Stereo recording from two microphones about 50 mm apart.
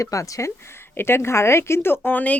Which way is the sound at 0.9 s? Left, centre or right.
Left.